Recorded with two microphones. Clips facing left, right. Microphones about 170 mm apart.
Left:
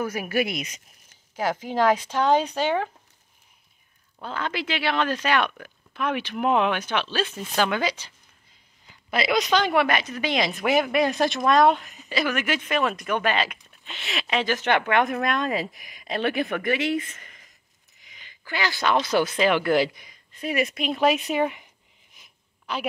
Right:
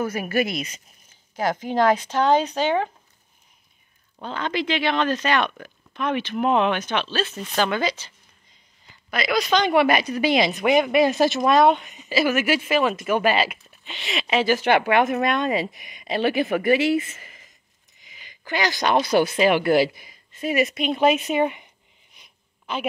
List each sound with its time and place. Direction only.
0.0 s speech: 10° left (ahead or behind)
4.2 s speech: 5° left (ahead or behind)
9.1 s a woman's voice: 25° left (ahead or behind)
9.5 s speech: centre (ahead or behind)
9.8 s speech: 10° right (ahead or behind)
18.0 s a sound: 10° right (ahead or behind)
19.0 s speech: 10° right (ahead or behind)
22.1 s wheeze: centre (ahead or behind)